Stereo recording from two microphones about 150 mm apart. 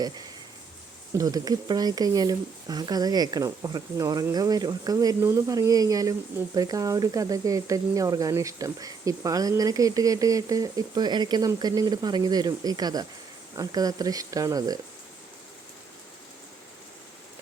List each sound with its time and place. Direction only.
1.2 s speech: 25° right (ahead or behind)